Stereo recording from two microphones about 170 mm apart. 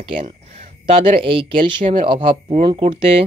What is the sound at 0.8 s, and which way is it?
Speech, 35° right (ahead or behind).